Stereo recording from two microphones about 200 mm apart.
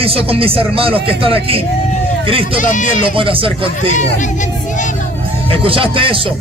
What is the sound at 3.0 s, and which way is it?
Speech, 25° right (ahead or behind).